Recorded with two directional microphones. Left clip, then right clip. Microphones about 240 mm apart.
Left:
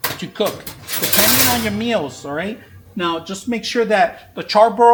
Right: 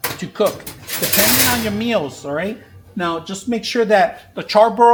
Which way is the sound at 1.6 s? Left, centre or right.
Centre.